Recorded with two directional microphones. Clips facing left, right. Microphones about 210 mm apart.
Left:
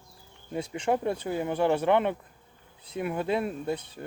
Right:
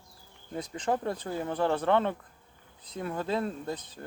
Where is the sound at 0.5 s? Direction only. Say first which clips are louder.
Left 3 dB; 10° left (ahead or behind).